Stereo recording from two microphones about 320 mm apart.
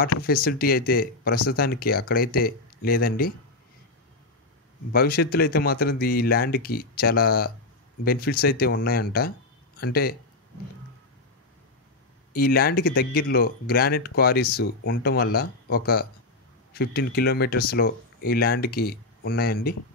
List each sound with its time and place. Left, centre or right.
0.1 s speech: left
4.9 s speech: left
12.3 s speech: left